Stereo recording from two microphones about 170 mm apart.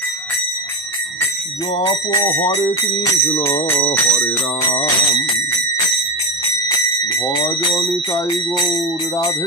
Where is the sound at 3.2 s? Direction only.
15° left (ahead or behind).